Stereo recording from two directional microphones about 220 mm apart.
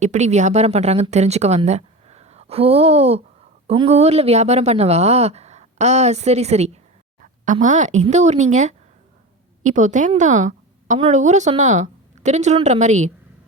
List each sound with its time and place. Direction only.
0.0 s a woman's voice: 30° right (ahead or behind)